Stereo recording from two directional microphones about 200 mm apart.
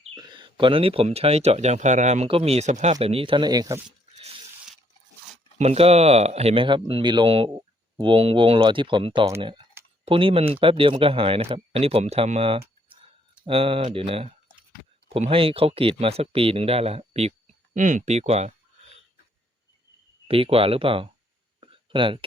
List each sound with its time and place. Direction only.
0.1 s speech: 20° right (ahead or behind)
5.5 s speech: 30° right (ahead or behind)
9.8 s a sound: 10° right (ahead or behind)
10.1 s speech: 25° right (ahead or behind)
20.2 s speech: 30° right (ahead or behind)
21.6 s a sound: 25° right (ahead or behind)